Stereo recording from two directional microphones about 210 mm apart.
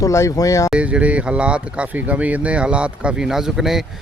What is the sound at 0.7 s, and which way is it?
Speech, 5° right (ahead or behind).